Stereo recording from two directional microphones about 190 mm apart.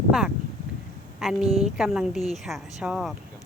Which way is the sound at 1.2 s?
Centre (ahead or behind).